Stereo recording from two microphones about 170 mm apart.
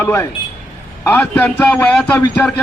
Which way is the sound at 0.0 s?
15° left (ahead or behind).